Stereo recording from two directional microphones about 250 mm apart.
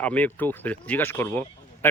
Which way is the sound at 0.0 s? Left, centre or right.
Centre.